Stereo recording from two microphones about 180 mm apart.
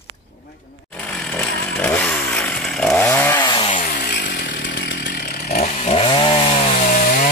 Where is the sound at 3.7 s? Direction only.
50° left (ahead or behind).